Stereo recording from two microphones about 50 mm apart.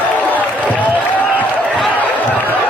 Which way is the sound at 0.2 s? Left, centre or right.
Left.